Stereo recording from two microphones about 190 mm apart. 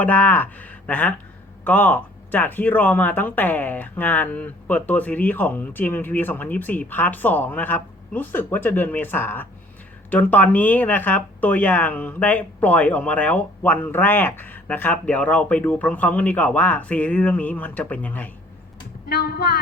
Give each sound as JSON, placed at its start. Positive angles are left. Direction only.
{"t": 0.0, "sound": "speech", "side_deg": 10}
{"t": 19.0, "sound": "speech", "side_deg": 55}